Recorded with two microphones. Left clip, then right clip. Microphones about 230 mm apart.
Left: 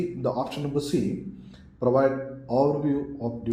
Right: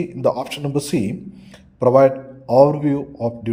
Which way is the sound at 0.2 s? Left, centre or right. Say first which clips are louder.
Right 11 dB; right.